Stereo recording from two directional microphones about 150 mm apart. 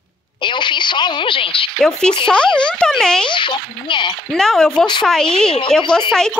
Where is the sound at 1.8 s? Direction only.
5° left (ahead or behind).